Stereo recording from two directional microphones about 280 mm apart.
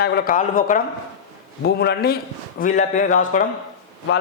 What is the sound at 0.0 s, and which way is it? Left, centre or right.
A man's voice, left.